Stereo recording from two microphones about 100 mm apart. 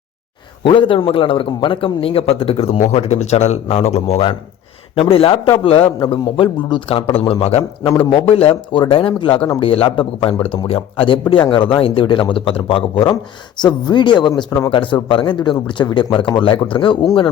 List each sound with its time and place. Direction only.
0.6 s a man's voice: 55° left (ahead or behind); by 4.4 s 80° left
4.9 s a man's voice: 65° left (ahead or behind)
13.6 s a man's voice: 45° left (ahead or behind)
16.1 s a man's voice: 60° left (ahead or behind)